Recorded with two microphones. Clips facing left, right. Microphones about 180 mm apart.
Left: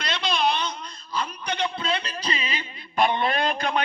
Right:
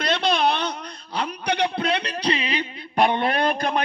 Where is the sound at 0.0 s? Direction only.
60° right (ahead or behind).